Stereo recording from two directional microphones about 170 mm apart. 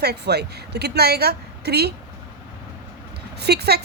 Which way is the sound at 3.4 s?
75° right (ahead or behind).